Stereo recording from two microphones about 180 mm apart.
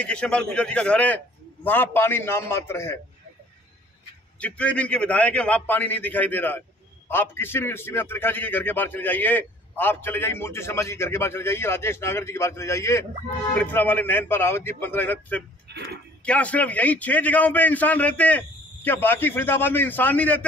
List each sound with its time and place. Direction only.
0.0 s a man's voice: 5° left (ahead or behind)
4.4 s a man's voice: 5° left (ahead or behind)
15.7 s speech: 65° right (ahead or behind)
16.3 s a man's voice: 10° left (ahead or behind)